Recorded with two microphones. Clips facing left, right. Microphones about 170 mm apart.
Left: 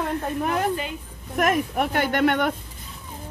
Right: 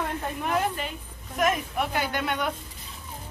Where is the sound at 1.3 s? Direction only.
55° left (ahead or behind).